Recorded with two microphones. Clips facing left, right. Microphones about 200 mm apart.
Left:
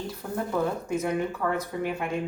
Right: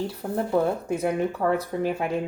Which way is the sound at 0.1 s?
30° right (ahead or behind).